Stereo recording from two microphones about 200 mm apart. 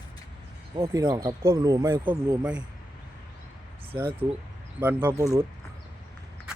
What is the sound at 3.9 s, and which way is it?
Speech, 25° right (ahead or behind).